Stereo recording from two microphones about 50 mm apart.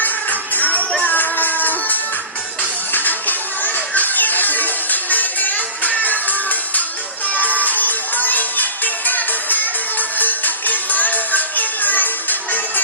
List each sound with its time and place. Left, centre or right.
0.0 s music: left